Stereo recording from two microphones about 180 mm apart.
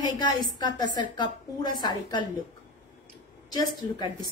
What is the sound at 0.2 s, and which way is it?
A woman's voice, 25° left (ahead or behind).